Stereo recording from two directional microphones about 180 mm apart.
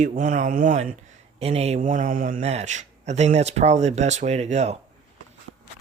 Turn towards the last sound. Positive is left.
turn(degrees=-40)  # may be behind; listen again after turning